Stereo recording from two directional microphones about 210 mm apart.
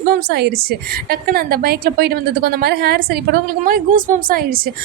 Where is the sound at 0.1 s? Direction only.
50° right (ahead or behind).